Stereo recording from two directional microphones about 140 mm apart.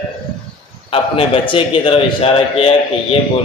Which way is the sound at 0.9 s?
40° left (ahead or behind).